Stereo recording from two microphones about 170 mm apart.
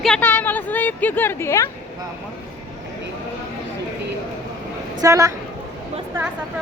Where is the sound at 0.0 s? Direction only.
5° left (ahead or behind).